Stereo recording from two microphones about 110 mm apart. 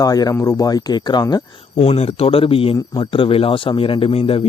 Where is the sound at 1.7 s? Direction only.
70° left (ahead or behind).